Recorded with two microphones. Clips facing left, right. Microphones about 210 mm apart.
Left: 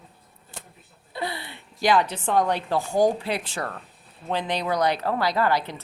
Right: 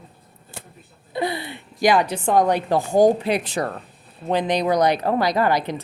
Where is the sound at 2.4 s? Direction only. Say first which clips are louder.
Right 4 dB; 15° right (ahead or behind).